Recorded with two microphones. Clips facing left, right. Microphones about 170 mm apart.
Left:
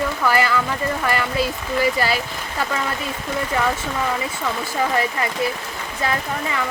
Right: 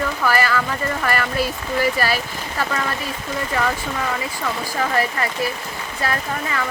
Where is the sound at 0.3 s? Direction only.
20° left (ahead or behind).